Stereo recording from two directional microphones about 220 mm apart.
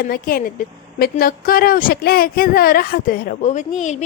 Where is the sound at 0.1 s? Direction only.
40° left (ahead or behind).